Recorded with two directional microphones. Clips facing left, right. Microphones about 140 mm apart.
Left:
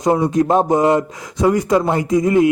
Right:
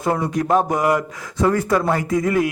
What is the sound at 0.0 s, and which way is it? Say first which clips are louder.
A man's voice: left 6 dB; 20° left (ahead or behind).